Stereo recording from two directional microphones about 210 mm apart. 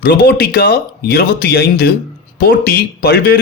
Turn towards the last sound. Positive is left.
turn(degrees=45)  # may be behind; listen again after turning